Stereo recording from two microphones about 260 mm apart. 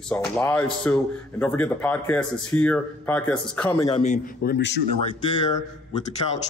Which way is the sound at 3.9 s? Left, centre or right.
Left.